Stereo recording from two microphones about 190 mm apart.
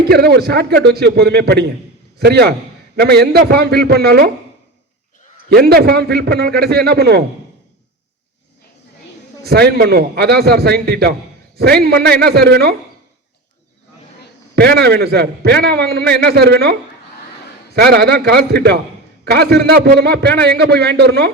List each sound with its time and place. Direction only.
0.1 s a man's voice: 55° right (ahead or behind)
5.5 s a man's voice: 55° right (ahead or behind)
9.4 s a man's voice: 60° right (ahead or behind)
14.5 s a man's voice: 55° right (ahead or behind)
17.7 s a man's voice: 55° right (ahead or behind)